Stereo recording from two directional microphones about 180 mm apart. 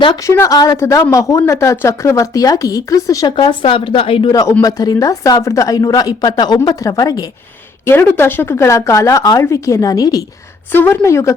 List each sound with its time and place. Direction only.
0.0 s a woman's voice: 20° left (ahead or behind)